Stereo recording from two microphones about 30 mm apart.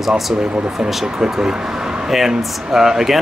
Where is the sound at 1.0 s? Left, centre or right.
Centre.